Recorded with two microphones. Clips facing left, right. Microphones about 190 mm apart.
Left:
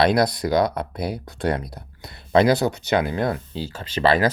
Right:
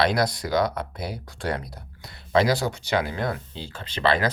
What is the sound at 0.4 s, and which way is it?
Speech, 30° left (ahead or behind).